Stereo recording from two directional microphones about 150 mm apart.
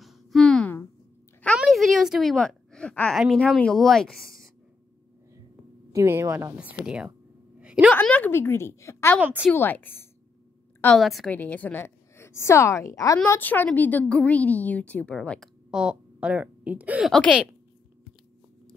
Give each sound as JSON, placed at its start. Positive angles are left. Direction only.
{"t": 0.0, "sound": "a sound", "side_deg": 0}
{"t": 3.2, "sound": "a woman's voice", "side_deg": 5}
{"t": 5.9, "sound": "a woman's voice", "side_deg": -15}
{"t": 7.5, "sound": "a sound", "side_deg": -5}
{"t": 7.9, "sound": "a woman's voice", "side_deg": 10}
{"t": 9.2, "sound": "a woman's voice", "side_deg": -10}
{"t": 9.5, "sound": "a woman's voice", "side_deg": 10}
{"t": 11.0, "sound": "a woman's voice", "side_deg": 0}
{"t": 11.3, "sound": "a woman's voice", "side_deg": 10}
{"t": 13.3, "sound": "a woman's voice", "side_deg": 10}
{"t": 15.7, "sound": "speech", "side_deg": -5}